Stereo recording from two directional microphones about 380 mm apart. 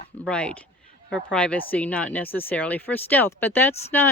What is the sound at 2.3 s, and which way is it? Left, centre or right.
Speech, centre.